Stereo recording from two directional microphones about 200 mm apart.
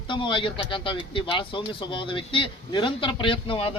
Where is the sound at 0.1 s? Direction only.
25° left (ahead or behind).